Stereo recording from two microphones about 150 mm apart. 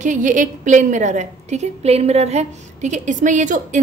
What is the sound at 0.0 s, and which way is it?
A woman's voice, 55° right (ahead or behind).